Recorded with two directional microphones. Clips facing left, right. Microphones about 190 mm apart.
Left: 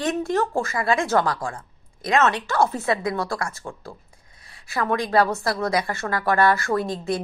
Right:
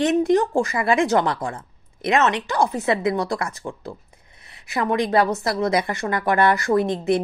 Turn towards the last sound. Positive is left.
turn(degrees=-20)  # may be behind; listen again after turning